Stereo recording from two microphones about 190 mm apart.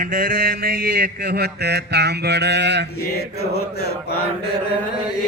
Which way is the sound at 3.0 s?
55° left (ahead or behind).